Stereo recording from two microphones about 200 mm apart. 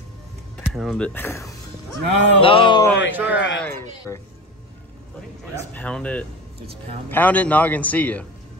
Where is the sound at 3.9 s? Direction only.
20° left (ahead or behind).